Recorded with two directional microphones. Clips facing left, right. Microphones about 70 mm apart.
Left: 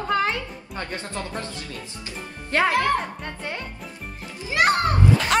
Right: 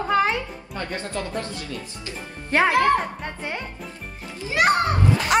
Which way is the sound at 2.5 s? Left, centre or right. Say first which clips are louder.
Right 2 dB; right.